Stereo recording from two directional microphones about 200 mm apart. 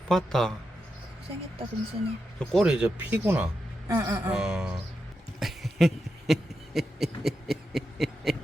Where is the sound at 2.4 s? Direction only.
Centre (ahead or behind).